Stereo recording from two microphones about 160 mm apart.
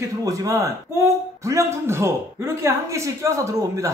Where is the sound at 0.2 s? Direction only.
20° right (ahead or behind).